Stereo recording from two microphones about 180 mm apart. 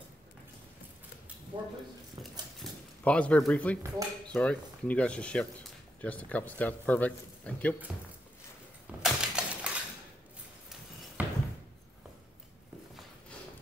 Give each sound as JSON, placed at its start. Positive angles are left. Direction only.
{"t": 1.5, "sound": "speech", "side_deg": -25}
{"t": 2.6, "sound": "speech", "side_deg": 5}
{"t": 9.0, "sound": "a sound", "side_deg": -5}
{"t": 11.2, "sound": "door", "side_deg": -10}